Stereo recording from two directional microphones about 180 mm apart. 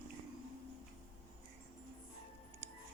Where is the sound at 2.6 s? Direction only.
10° right (ahead or behind).